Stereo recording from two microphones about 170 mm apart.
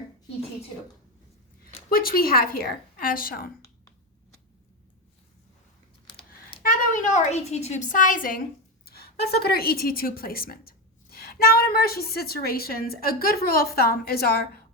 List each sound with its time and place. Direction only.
1.9 s a woman's voice: 60° left (ahead or behind)
6.6 s a woman's voice: 55° left (ahead or behind)
8.8 s a woman's voice: 65° left (ahead or behind)